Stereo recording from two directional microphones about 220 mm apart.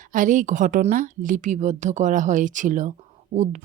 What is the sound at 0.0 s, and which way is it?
A woman's voice, 35° right (ahead or behind).